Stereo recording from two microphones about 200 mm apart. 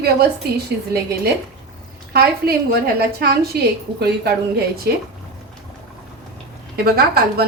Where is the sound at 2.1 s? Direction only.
50° right (ahead or behind).